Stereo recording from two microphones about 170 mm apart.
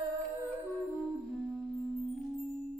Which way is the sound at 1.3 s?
5° left (ahead or behind).